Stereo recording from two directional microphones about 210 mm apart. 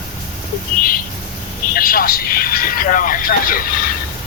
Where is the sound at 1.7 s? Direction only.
45° left (ahead or behind).